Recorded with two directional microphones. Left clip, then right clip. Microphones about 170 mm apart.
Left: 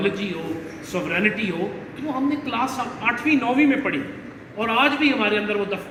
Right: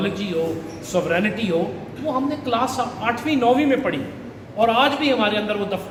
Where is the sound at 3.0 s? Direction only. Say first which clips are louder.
Even; 35° right (ahead or behind).